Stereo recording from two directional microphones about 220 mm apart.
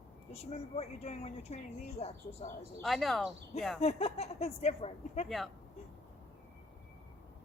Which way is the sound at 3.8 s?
25° left (ahead or behind).